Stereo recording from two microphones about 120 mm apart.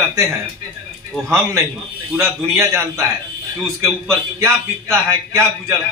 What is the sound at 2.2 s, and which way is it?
Speech, 25° right (ahead or behind).